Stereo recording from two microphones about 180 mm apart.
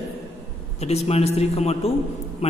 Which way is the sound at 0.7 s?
35° left (ahead or behind).